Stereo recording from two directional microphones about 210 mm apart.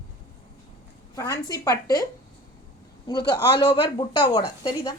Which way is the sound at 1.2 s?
15° left (ahead or behind).